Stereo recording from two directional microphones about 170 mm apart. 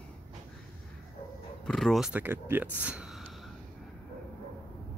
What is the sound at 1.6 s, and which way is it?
Speech, centre (ahead or behind).